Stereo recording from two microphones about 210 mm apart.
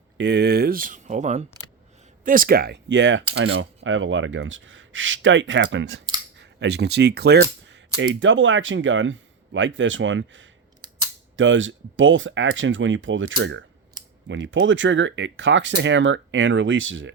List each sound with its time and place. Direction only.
0.2 s speech: 55° right (ahead or behind)
7.7 s speech: 65° right (ahead or behind)
10.8 s scissors: 20° right (ahead or behind)
11.3 s speech: 65° right (ahead or behind)